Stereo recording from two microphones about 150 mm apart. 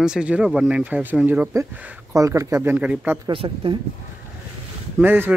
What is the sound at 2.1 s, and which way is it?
Speech, 20° right (ahead or behind).